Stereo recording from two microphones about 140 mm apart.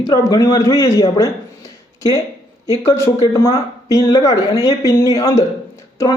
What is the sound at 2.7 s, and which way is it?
A man's voice, 20° left (ahead or behind).